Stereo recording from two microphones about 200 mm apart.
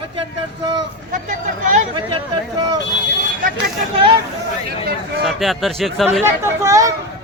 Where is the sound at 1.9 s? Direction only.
25° right (ahead or behind).